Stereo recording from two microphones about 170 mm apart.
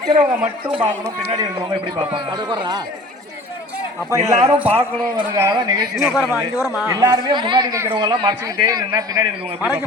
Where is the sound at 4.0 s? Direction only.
20° right (ahead or behind).